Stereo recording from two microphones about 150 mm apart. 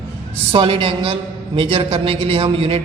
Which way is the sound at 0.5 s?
35° right (ahead or behind).